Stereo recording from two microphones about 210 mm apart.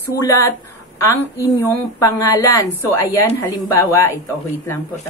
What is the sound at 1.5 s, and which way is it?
A woman's voice, 15° left (ahead or behind).